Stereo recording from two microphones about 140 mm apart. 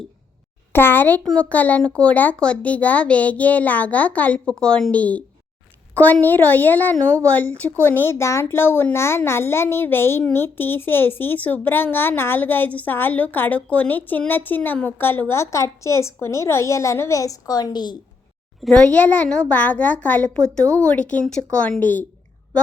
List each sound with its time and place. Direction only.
0.7 s speech: 15° left (ahead or behind); by 17.9 s 30° left (ahead or behind)
18.6 s speech: 10° left (ahead or behind)